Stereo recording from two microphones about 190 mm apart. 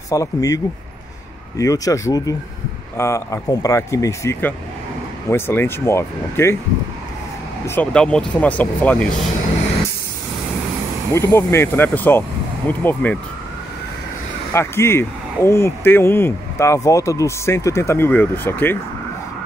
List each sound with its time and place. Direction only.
0.1 s speech: 20° left (ahead or behind)
1.6 s speech: 15° left (ahead or behind)
7.6 s speech: 10° left (ahead or behind)
11.1 s speech: 15° left (ahead or behind)
14.5 s speech: 15° left (ahead or behind)